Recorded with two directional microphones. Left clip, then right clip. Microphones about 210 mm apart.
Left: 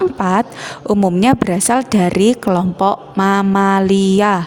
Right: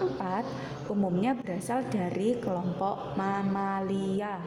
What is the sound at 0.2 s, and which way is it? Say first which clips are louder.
A woman's voice: left 16 dB; 45° left (ahead or behind).